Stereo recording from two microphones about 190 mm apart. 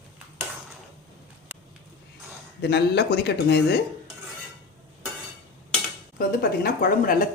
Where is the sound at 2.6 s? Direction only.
60° left (ahead or behind).